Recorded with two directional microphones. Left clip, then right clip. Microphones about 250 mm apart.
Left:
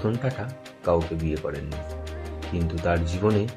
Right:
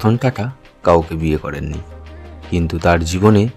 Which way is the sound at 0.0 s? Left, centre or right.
Right.